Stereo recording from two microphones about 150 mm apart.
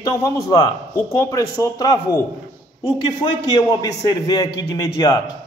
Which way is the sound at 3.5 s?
25° left (ahead or behind).